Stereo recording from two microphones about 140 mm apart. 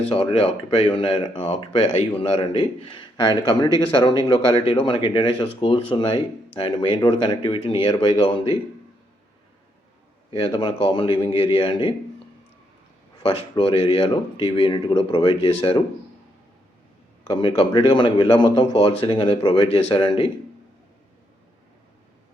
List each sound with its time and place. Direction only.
0.1 s speech: 45° left (ahead or behind)
10.3 s speech: 40° left (ahead or behind)
13.2 s speech: 40° left (ahead or behind)
17.2 s speech: 40° left (ahead or behind)